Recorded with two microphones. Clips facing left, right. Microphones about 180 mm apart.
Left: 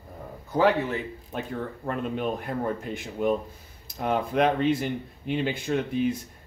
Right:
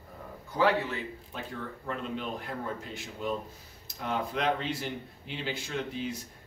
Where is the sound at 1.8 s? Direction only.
55° left (ahead or behind).